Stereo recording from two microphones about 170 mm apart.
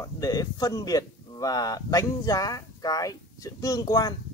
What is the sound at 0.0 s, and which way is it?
A man's voice, 20° left (ahead or behind).